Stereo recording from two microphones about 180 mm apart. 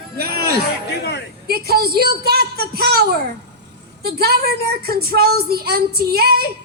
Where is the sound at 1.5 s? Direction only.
60° right (ahead or behind).